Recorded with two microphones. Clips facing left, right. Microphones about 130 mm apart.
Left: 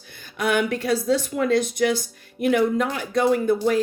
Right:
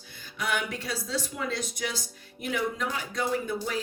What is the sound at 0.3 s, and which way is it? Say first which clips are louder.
A woman's voice: left 9 dB; 60° left (ahead or behind).